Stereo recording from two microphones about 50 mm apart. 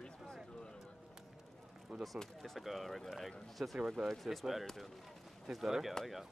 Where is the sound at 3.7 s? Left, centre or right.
Centre.